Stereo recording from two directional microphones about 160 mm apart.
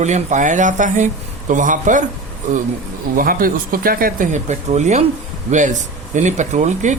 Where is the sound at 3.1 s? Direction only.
60° right (ahead or behind).